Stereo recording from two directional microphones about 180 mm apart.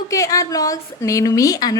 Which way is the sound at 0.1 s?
20° left (ahead or behind).